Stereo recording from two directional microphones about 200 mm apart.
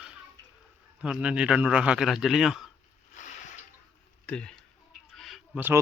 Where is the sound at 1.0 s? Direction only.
5° right (ahead or behind).